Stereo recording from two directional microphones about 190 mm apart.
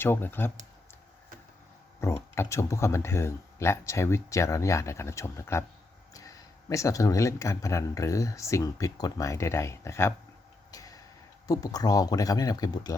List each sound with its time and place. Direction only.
0.0 s speech: 10° left (ahead or behind)
2.0 s speech: 15° left (ahead or behind)
10.7 s a sound: 20° left (ahead or behind)
11.4 s speech: 20° left (ahead or behind)